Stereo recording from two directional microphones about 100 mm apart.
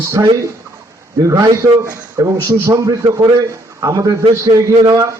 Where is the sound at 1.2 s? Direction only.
30° right (ahead or behind).